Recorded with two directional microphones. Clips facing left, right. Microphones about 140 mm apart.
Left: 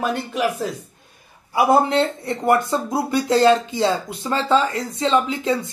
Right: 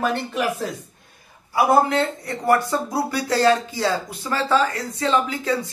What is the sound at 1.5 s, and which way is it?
Speech, 25° left (ahead or behind).